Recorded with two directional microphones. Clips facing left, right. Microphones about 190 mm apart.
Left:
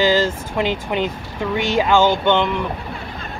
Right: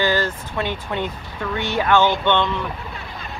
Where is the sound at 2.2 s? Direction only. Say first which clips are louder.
Left 2 dB; 10° left (ahead or behind).